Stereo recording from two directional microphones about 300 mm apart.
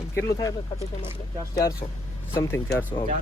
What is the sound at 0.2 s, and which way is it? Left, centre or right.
Speech, centre.